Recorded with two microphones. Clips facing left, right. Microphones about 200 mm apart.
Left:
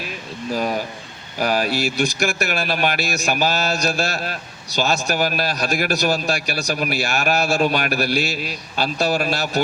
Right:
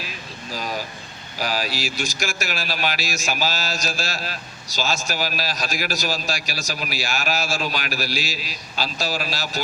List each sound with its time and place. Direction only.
1.4 s speech: 55° left (ahead or behind)